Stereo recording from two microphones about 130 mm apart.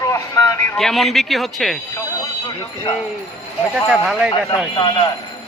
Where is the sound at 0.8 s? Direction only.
Centre (ahead or behind).